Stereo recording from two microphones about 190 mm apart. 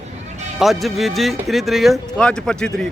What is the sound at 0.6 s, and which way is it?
A man's voice, centre (ahead or behind).